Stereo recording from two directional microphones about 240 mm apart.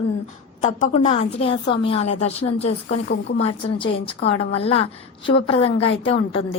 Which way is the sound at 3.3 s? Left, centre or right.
Left.